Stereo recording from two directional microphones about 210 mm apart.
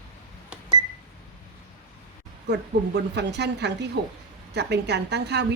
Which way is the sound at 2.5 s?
55° right (ahead or behind).